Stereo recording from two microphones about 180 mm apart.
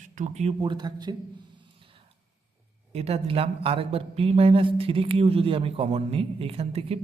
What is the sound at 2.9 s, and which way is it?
A man's voice, 35° right (ahead or behind).